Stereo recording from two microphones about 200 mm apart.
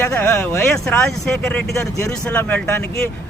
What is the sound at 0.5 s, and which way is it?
Speech, 5° left (ahead or behind).